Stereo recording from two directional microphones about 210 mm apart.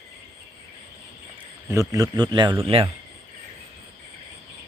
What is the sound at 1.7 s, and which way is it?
Speech, 15° right (ahead or behind).